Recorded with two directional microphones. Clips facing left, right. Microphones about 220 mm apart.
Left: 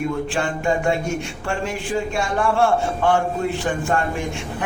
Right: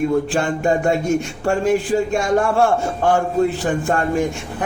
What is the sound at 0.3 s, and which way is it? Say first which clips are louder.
A man's voice: right 3 dB; 40° right (ahead or behind).